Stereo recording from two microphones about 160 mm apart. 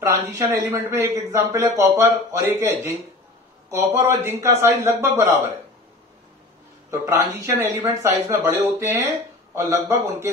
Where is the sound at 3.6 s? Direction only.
20° right (ahead or behind).